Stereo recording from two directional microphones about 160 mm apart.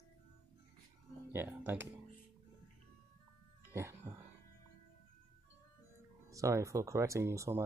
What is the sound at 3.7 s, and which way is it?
Music, 15° right (ahead or behind).